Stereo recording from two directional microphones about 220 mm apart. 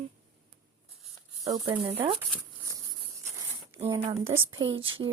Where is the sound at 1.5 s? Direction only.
25° right (ahead or behind).